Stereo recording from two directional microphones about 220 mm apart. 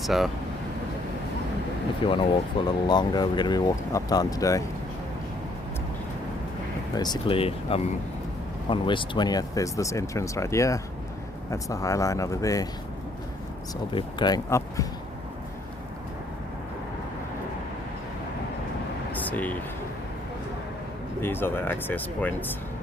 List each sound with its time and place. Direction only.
0.0 s speech: centre (ahead or behind)
2.0 s speech: 25° left (ahead or behind)
6.9 s speech: 20° left (ahead or behind)
13.9 s speech: 20° left (ahead or behind)
19.1 s a sound: 5° left (ahead or behind)
21.2 s speech: 10° left (ahead or behind)